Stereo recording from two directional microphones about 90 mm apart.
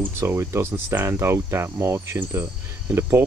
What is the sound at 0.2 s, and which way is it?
Speech, 30° right (ahead or behind).